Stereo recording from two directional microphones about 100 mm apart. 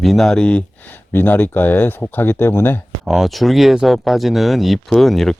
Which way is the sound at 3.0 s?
Centre (ahead or behind).